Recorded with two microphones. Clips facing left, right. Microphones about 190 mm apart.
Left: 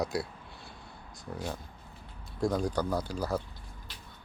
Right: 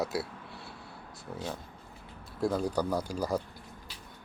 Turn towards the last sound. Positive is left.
turn(degrees=-10)  # may be behind; listen again after turning